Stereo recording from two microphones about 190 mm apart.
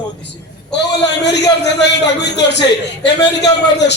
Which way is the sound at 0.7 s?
65° left (ahead or behind).